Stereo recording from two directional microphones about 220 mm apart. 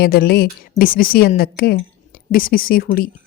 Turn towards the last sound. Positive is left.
turn(degrees=40)  # may be behind; listen again after turning